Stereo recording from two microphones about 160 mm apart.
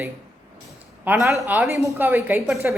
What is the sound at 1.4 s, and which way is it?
A woman's voice, 15° right (ahead or behind).